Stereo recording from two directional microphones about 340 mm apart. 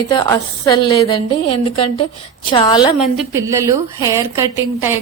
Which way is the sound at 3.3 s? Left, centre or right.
Centre.